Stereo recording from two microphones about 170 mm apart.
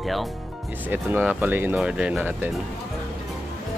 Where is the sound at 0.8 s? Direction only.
10° right (ahead or behind).